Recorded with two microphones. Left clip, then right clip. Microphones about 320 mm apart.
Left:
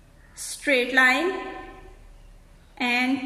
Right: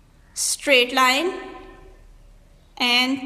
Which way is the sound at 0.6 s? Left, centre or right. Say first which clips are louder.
Right 2 dB; right.